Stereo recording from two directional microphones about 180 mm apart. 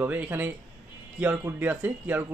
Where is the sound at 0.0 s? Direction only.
10° right (ahead or behind).